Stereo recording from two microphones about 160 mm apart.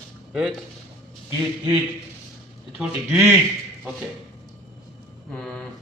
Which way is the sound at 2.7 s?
5° right (ahead or behind).